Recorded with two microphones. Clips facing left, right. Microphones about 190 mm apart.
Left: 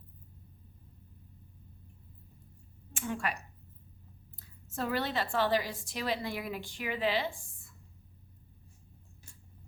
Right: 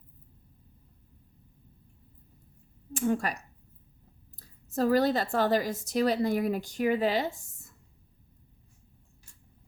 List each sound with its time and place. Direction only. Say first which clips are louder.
2.9 s a woman's voice: right 7 dB; 40° right (ahead or behind)
4.4 s a woman's voice: right 8 dB; 40° right (ahead or behind)